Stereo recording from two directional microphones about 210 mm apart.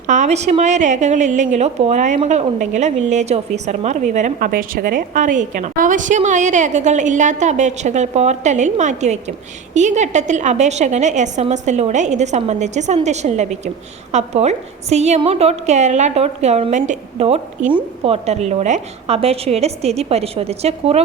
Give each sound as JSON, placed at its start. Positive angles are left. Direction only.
{"t": 0.1, "sound": "a woman's voice", "side_deg": -35}